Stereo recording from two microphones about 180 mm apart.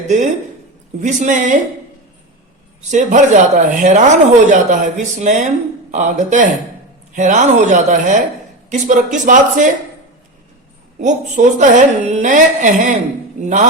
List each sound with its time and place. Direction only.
0.0 s a woman's voice: 40° right (ahead or behind)
2.9 s speech: 45° right (ahead or behind)
11.0 s speech: 40° right (ahead or behind)